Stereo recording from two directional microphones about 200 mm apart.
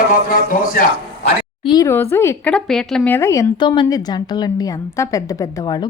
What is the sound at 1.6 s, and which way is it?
A woman's voice, 20° left (ahead or behind).